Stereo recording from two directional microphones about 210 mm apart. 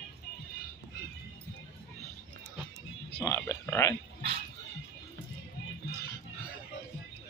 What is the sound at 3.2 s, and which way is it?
Speech, 10° left (ahead or behind).